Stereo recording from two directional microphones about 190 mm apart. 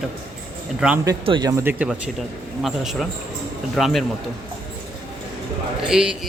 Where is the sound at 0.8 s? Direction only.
10° right (ahead or behind).